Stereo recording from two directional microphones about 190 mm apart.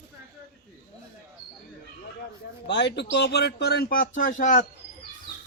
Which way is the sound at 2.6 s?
65° left (ahead or behind).